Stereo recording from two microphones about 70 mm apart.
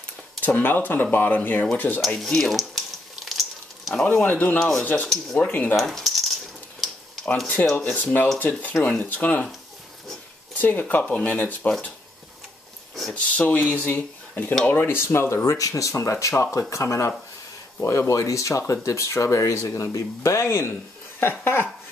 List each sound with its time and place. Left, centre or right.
0.4 s speech: left
2.0 s speech: centre
3.3 s a sound: centre
4.0 s speech: left
5.8 s rattle: centre
7.7 s speech: left
10.6 s speech: left
13.1 s speech: centre